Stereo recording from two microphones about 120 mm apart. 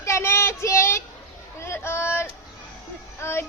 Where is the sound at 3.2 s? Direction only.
20° left (ahead or behind).